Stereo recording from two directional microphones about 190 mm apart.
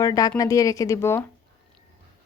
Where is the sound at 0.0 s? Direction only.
20° left (ahead or behind).